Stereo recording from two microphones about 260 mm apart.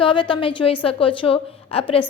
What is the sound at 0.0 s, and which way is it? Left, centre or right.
A woman's voice, centre.